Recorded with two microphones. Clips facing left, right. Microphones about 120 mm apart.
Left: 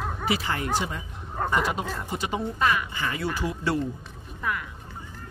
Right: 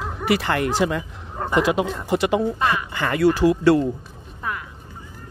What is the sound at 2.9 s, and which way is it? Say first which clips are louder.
Speech: right 11 dB; 65° right (ahead or behind).